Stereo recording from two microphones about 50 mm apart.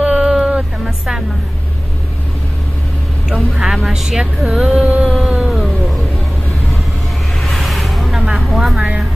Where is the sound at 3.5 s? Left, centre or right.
Centre.